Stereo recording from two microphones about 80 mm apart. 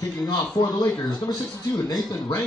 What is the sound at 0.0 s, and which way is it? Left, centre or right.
A man's voice, left.